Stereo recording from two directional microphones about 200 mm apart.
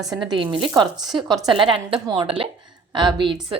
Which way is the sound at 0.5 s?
25° right (ahead or behind).